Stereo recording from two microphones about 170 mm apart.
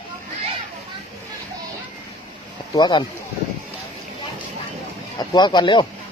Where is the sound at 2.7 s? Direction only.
25° left (ahead or behind).